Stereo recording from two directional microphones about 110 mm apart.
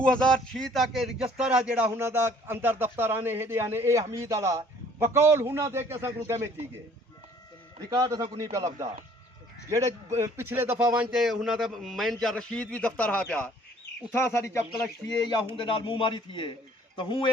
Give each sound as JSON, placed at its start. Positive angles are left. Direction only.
{"t": 0.0, "sound": "speech", "side_deg": 10}
{"t": 7.9, "sound": "speech", "side_deg": -35}
{"t": 14.2, "sound": "speech", "side_deg": 25}
{"t": 15.5, "sound": "a man's voice", "side_deg": 50}